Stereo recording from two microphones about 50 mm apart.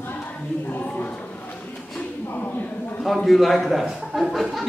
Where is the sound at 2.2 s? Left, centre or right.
Left.